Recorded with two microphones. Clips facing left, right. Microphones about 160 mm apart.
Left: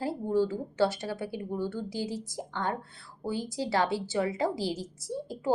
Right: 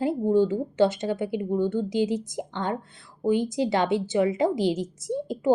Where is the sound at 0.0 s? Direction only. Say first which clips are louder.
Right 6 dB; 20° right (ahead or behind).